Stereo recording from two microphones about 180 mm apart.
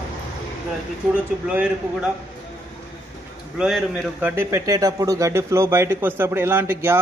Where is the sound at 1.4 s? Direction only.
10° right (ahead or behind).